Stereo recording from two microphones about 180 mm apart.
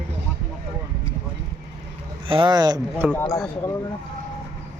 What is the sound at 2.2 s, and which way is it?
Speech, 25° right (ahead or behind).